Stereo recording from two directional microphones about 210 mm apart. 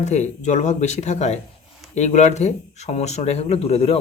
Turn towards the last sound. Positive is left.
turn(degrees=30)  # may be behind; listen again after turning